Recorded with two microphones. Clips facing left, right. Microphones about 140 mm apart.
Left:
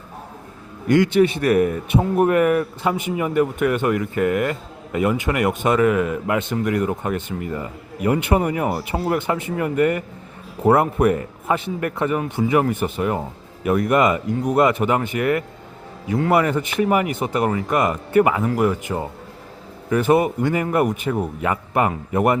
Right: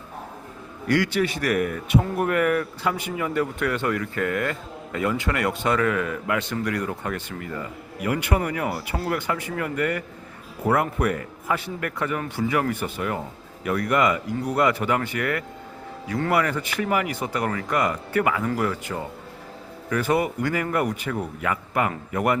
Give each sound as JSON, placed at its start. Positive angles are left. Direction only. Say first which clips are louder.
{"t": 0.9, "sound": "speech", "louder": "left 7 dB", "side_deg": 20}